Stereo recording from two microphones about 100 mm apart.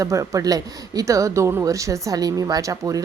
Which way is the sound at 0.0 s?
35° right (ahead or behind).